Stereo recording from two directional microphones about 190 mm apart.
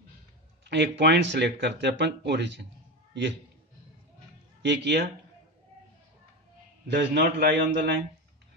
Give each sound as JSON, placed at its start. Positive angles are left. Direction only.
{"t": 0.7, "sound": "speech", "side_deg": -65}
{"t": 4.6, "sound": "speech", "side_deg": -65}
{"t": 6.9, "sound": "speech", "side_deg": -60}